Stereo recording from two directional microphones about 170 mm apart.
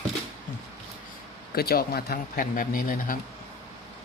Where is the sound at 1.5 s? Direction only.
65° left (ahead or behind).